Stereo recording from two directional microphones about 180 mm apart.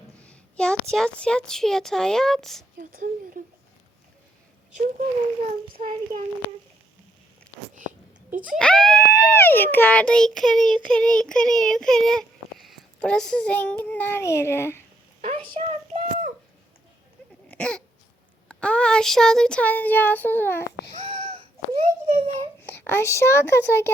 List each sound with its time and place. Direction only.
0.2 s speech: 5° left (ahead or behind)
2.7 s speech: 50° right (ahead or behind)
5.8 s speech: 45° right (ahead or behind)
8.5 s child singing: 5° left (ahead or behind)
15.2 s a sound: 35° right (ahead or behind)
17.5 s a sound: 5° left (ahead or behind)
18.4 s child singing: 5° left (ahead or behind)
20.9 s a sound: 35° right (ahead or behind)
22.6 s speech: 10° left (ahead or behind)